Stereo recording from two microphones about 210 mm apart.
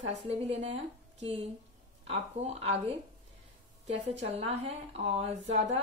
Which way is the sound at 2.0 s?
30° right (ahead or behind).